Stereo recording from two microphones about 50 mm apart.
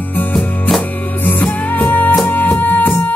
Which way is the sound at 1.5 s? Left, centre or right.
Left.